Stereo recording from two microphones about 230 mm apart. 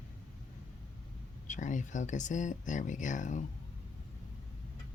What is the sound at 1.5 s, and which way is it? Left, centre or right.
Speech, left.